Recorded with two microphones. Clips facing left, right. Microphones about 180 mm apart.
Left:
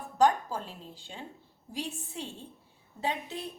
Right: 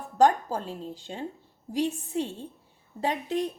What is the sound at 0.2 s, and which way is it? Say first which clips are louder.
A woman's voice: right 4 dB; 45° right (ahead or behind).